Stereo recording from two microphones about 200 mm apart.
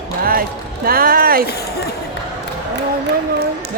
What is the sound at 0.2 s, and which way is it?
Music, 45° right (ahead or behind).